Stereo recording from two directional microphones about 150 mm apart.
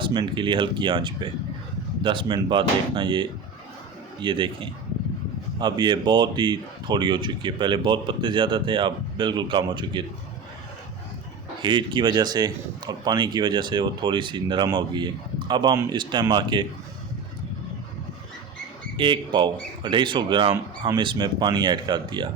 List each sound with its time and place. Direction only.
0.0 s speech: 30° right (ahead or behind)
11.6 s speech: 30° right (ahead or behind)
18.9 s speech: 35° right (ahead or behind)